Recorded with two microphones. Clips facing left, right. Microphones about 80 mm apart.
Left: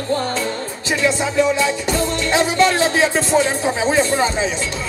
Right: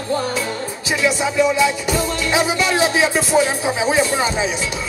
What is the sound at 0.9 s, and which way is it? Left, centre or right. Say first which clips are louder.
Music: even; centre.